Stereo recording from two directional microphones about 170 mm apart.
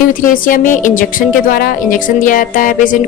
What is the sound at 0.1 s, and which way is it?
A woman's voice, 55° left (ahead or behind).